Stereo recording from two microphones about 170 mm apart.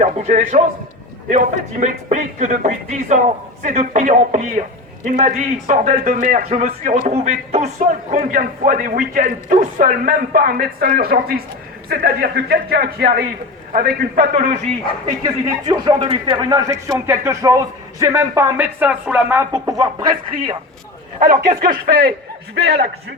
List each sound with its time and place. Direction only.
0.0 s speech: 45° right (ahead or behind)
8.3 s a man's voice: 50° right (ahead or behind)
15.2 s speech: 25° right (ahead or behind)
16.5 s speech: 20° right (ahead or behind)
21.2 s a man's voice: 50° right (ahead or behind); by 22.9 s 70° right (ahead or behind)